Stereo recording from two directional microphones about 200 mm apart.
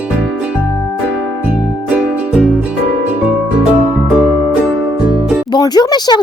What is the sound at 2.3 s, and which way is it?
Music, 5° right (ahead or behind).